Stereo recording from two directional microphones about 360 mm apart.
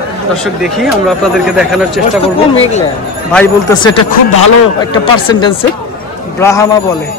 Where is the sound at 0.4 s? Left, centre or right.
Centre.